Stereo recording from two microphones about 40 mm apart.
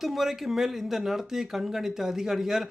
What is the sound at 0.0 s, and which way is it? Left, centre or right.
Speech, centre.